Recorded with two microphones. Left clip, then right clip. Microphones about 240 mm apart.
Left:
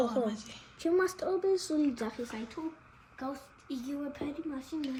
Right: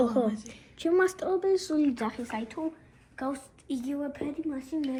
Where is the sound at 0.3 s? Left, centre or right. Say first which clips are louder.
Right 4 dB; centre.